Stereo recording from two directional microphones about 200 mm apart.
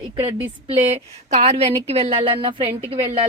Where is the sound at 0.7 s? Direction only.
35° right (ahead or behind).